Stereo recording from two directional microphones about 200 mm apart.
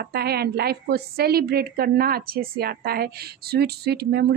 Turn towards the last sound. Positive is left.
turn(degrees=-55)  # may be behind; listen again after turning